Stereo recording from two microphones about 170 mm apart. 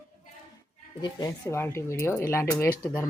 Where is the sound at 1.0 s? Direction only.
20° left (ahead or behind).